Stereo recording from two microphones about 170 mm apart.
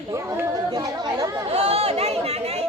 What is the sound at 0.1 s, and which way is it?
Chatter, 20° right (ahead or behind).